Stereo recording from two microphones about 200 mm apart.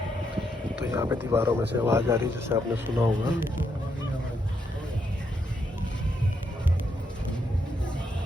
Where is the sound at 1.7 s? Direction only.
10° right (ahead or behind).